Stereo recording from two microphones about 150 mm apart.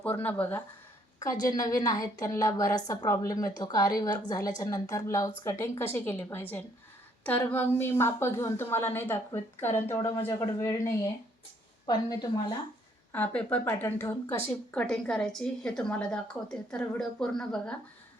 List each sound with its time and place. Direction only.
0.0 s a woman's voice: 10° left (ahead or behind)
1.2 s a woman's voice: 25° left (ahead or behind)
13.1 s a woman's voice: 10° left (ahead or behind)